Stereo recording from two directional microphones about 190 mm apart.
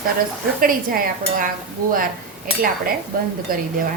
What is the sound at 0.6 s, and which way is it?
Speech, 50° right (ahead or behind).